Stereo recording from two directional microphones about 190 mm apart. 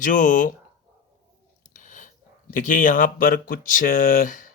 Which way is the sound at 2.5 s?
45° left (ahead or behind).